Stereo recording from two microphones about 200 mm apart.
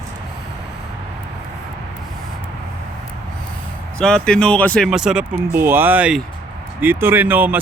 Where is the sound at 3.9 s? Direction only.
5° left (ahead or behind).